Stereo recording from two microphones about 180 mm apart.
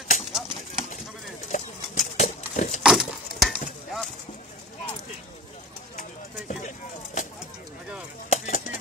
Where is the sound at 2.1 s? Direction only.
40° left (ahead or behind).